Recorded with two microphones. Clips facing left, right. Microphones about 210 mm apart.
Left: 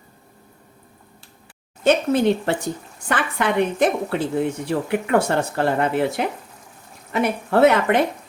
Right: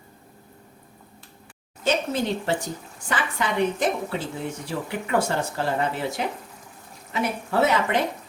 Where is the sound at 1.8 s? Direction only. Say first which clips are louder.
Left 7 dB; 60° left (ahead or behind).